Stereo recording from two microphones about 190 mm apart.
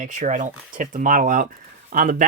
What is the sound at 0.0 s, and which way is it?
Speech, 40° right (ahead or behind).